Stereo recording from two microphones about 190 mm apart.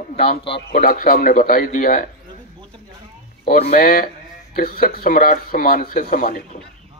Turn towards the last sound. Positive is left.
turn(degrees=45)  # may be behind; listen again after turning